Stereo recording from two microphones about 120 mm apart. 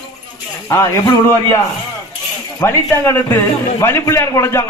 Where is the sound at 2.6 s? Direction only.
25° left (ahead or behind).